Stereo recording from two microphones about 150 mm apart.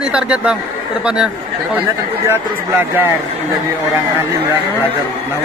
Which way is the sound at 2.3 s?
15° right (ahead or behind).